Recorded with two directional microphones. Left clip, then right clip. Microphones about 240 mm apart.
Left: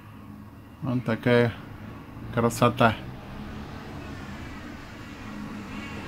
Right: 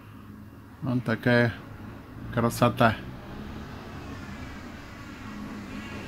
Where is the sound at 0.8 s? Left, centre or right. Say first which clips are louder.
Even; centre.